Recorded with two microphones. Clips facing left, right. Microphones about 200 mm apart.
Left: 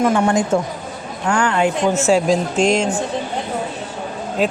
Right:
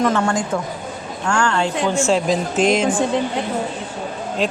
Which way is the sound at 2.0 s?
Centre (ahead or behind).